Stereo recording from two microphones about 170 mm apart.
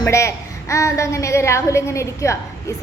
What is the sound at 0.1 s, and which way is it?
A woman's voice, 20° left (ahead or behind).